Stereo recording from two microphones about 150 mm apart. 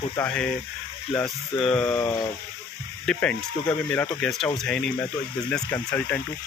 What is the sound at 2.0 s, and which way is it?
Speech, 25° left (ahead or behind).